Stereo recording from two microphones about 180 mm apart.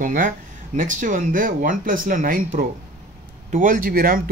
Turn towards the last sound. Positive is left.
turn(degrees=-55)  # may be behind; listen again after turning